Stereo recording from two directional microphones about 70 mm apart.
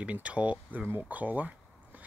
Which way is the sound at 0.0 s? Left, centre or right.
Centre.